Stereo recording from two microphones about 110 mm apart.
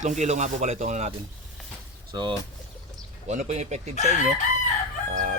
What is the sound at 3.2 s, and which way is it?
Speech, 90° right.